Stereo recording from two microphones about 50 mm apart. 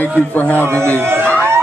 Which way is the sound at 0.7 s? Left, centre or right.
Right.